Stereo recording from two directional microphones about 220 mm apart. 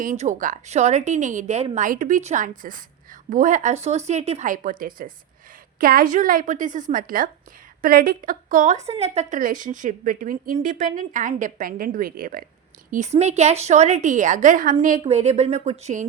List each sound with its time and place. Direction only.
0.2 s a woman's voice: 35° right (ahead or behind)